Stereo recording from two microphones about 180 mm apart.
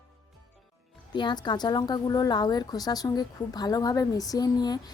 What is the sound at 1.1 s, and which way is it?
A woman's voice, 25° left (ahead or behind).